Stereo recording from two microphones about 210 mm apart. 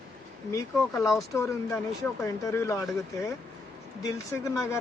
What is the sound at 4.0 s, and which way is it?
Speech, 15° left (ahead or behind).